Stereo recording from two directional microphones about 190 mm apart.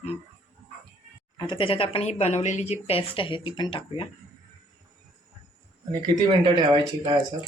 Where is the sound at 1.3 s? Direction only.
25° left (ahead or behind).